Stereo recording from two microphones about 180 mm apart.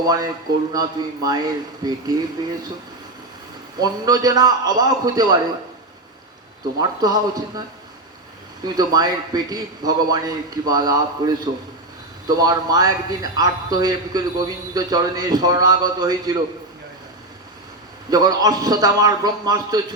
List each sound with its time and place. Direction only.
0.7 s a man's voice: 20° right (ahead or behind)
3.8 s a man's voice: 20° right (ahead or behind)
6.7 s a man's voice: 20° right (ahead or behind)
8.6 s a man's voice: 20° right (ahead or behind)
18.1 s a man's voice: 20° right (ahead or behind)